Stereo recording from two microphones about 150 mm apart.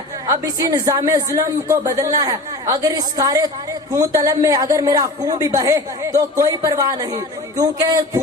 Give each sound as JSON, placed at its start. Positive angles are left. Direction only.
{"t": 0.3, "sound": "a man's voice", "side_deg": -25}